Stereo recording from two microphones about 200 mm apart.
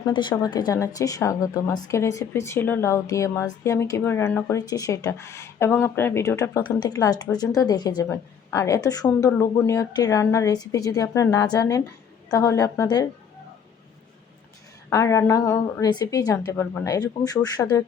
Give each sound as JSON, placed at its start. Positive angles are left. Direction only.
{"t": 0.0, "sound": "a woman's voice", "side_deg": 20}
{"t": 14.8, "sound": "a woman's voice", "side_deg": 15}